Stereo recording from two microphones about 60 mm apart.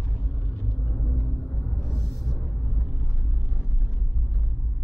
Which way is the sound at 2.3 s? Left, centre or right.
Left.